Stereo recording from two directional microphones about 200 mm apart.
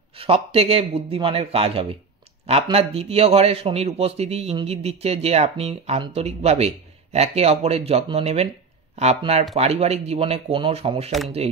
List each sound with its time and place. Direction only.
0.1 s a man's voice: 30° right (ahead or behind)
11.1 s speech: centre (ahead or behind)